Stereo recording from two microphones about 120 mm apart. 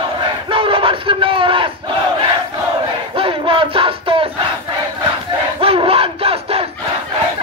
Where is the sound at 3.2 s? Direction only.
50° right (ahead or behind).